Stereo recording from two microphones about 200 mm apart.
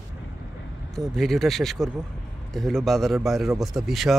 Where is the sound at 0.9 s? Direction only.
Centre (ahead or behind).